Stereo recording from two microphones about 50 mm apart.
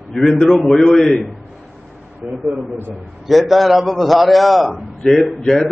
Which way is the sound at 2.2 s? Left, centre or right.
Right.